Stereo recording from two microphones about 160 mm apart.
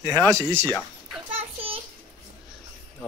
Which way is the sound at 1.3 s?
35° right (ahead or behind).